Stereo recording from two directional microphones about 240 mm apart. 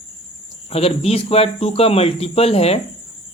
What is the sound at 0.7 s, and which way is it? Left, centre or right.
Speech, left.